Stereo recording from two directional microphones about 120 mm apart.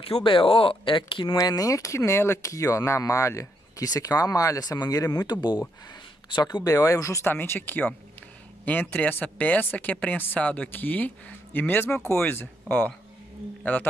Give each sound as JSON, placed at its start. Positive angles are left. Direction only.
{"t": 0.1, "sound": "speech", "side_deg": 45}
{"t": 1.4, "sound": "speech", "side_deg": 30}